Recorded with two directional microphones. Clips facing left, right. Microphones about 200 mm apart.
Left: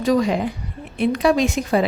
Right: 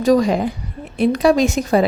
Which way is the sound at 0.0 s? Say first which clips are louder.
Right 4 dB; 40° right (ahead or behind).